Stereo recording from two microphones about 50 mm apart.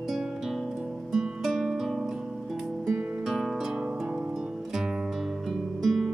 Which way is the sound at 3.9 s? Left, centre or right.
Centre.